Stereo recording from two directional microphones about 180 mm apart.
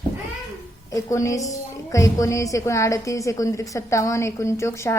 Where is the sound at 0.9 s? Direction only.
15° left (ahead or behind).